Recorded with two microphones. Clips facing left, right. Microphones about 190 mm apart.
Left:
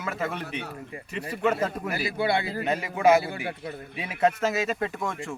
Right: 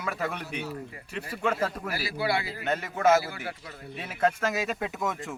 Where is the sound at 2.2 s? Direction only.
25° left (ahead or behind).